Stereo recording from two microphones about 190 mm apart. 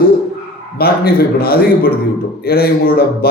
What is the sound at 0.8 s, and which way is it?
A man's voice, 55° left (ahead or behind).